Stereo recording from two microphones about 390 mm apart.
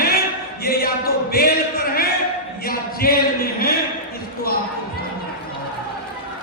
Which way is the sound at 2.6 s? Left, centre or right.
Left.